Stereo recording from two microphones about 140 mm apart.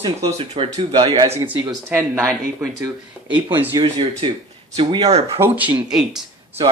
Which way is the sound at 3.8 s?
40° right (ahead or behind).